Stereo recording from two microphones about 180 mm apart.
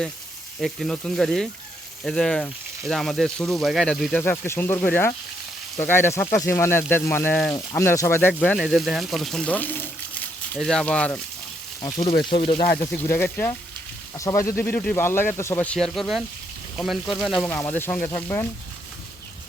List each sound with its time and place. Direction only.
0.6 s speech: centre (ahead or behind)
7.5 s speech: 20° left (ahead or behind)
12.2 s speech: 30° left (ahead or behind)
13.1 s speech: 10° left (ahead or behind)